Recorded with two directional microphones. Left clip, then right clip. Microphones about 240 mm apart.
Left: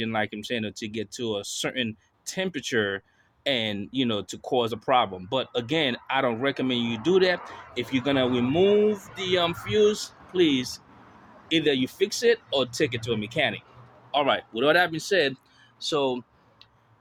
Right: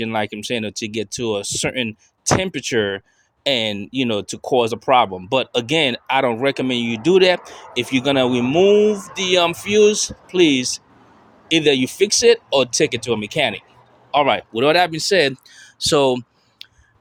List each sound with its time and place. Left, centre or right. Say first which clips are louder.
0.0 s speech: right 6 dB; right